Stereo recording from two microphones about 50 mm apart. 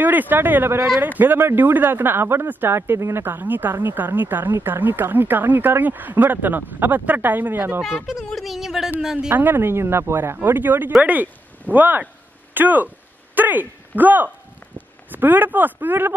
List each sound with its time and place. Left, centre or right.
0.0 s speech: right
3.0 s speech: right
3.3 s speech: right
8.4 s a sound: centre
9.0 s speech: centre
9.3 s speech: right
10.3 s speech: right
12.5 s a sound: right
15.0 s speech: right